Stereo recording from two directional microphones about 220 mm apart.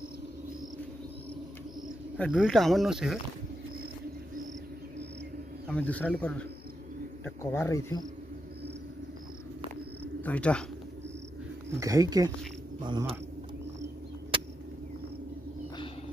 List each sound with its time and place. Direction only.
2.1 s speech: centre (ahead or behind)
5.7 s speech: 5° left (ahead or behind)
10.2 s speech: 5° left (ahead or behind)
11.8 s speech: 15° right (ahead or behind)